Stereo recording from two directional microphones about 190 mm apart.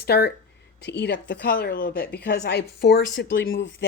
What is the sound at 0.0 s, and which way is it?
A woman's voice, 55° left (ahead or behind).